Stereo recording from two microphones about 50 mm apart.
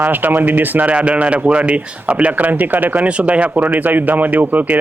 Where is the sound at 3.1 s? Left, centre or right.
Right.